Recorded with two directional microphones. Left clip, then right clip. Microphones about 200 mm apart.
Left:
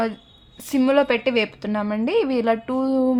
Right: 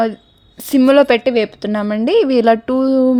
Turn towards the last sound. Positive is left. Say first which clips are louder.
# right 7 dB
turn(degrees=-30)  # may be behind; listen again after turning